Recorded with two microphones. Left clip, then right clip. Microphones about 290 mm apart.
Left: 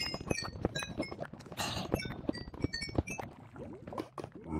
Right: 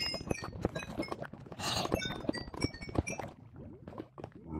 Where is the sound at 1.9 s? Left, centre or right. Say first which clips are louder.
Right 1 dB; centre.